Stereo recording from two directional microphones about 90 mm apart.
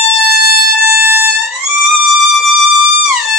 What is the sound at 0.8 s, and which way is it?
Music, 25° right (ahead or behind).